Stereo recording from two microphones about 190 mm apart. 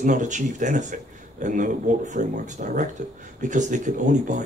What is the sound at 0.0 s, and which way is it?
Speech, 40° right (ahead or behind).